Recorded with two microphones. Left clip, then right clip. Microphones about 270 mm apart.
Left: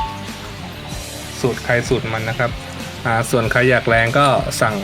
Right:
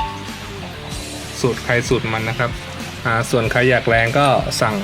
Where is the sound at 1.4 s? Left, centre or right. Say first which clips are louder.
Even; centre.